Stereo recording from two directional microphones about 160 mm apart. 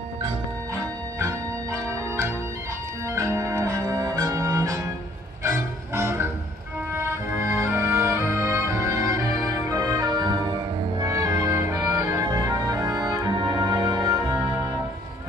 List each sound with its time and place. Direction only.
1.2 s organ: 15° right (ahead or behind)
5.4 s music: 15° right (ahead or behind)